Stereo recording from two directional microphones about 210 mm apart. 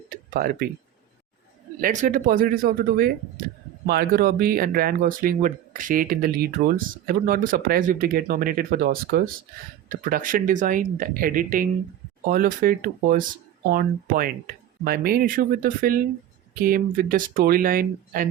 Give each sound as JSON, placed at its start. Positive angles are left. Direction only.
{"t": 0.1, "sound": "tick-tock", "side_deg": -45}
{"t": 1.8, "sound": "speech", "side_deg": -40}